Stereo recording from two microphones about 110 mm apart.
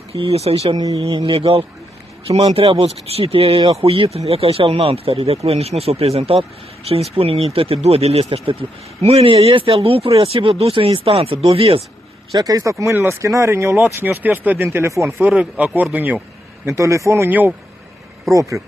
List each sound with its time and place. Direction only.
0.1 s speech: 65° right (ahead or behind)
0.9 s speech: 50° right (ahead or behind)
2.2 s speech: 65° right (ahead or behind)
12.3 s speech: 35° right (ahead or behind)
15.3 s speech: 15° right (ahead or behind)
16.6 s speech: 25° right (ahead or behind)
18.2 s speech: 30° right (ahead or behind)